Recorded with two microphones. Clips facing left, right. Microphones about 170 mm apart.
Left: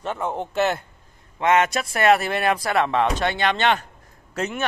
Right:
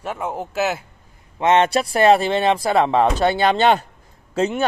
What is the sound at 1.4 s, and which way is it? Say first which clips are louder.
Speech: right 3 dB; 30° right (ahead or behind).